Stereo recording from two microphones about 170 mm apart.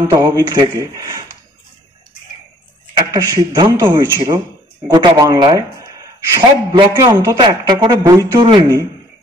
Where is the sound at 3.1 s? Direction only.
20° right (ahead or behind).